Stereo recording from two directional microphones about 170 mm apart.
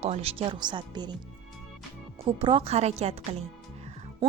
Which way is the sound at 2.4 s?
35° right (ahead or behind).